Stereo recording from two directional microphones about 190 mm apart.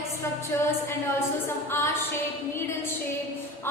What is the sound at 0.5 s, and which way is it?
Speech, 15° left (ahead or behind).